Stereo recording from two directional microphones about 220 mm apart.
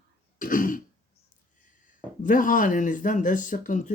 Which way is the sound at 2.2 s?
35° left (ahead or behind).